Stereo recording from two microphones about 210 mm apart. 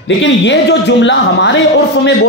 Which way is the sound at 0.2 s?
55° left (ahead or behind).